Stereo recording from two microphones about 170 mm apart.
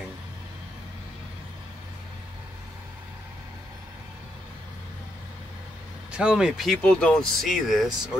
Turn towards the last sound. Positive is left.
turn(degrees=0)  # may be behind; listen again after turning